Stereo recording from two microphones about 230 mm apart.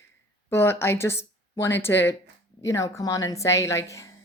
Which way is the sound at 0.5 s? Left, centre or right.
Centre.